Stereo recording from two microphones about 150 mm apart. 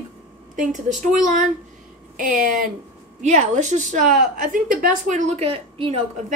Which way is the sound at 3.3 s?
50° right (ahead or behind).